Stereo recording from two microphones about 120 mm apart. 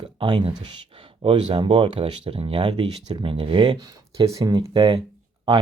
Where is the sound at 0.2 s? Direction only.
40° right (ahead or behind).